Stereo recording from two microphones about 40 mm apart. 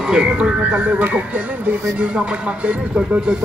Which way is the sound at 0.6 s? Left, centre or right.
Right.